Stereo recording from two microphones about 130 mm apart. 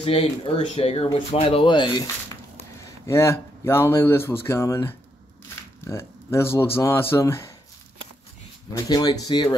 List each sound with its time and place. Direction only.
0.0 s speech: 50° left (ahead or behind)
3.1 s speech: 20° left (ahead or behind)
8.8 s speech: 30° left (ahead or behind)